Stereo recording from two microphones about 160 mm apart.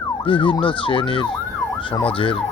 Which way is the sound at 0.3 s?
30° left (ahead or behind).